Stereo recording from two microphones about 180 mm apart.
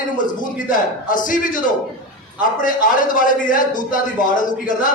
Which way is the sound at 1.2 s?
45° left (ahead or behind).